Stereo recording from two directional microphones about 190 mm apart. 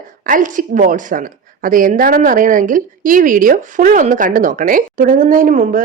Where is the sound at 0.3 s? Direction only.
45° right (ahead or behind).